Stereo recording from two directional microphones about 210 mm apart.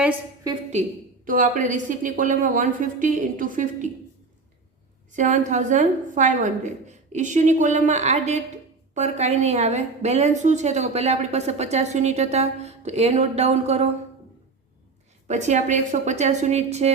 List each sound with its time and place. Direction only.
0.7 s a woman's voice: 35° right (ahead or behind)
5.1 s a woman's voice: 35° right (ahead or behind)
15.3 s a woman's voice: 35° right (ahead or behind)